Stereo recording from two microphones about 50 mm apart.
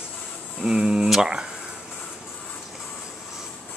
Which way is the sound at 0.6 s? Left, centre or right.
Centre.